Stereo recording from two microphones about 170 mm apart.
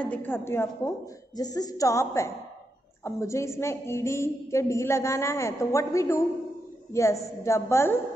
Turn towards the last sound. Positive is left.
turn(degrees=15)  # may be behind; listen again after turning